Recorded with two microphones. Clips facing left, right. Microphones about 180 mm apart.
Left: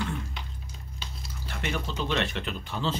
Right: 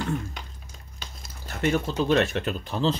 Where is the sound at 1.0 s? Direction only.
45° right (ahead or behind).